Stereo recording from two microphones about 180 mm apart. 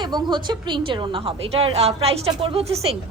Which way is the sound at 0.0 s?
25° right (ahead or behind).